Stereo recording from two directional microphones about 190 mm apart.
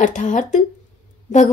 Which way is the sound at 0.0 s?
40° left (ahead or behind).